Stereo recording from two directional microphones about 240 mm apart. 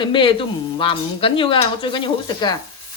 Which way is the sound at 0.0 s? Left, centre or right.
Centre.